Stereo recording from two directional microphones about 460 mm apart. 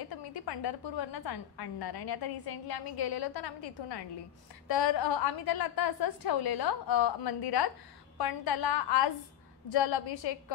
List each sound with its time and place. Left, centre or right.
0.1 s a woman's voice: left
9.7 s a woman's voice: left